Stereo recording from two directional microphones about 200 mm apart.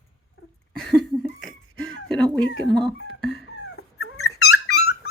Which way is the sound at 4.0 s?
90° left.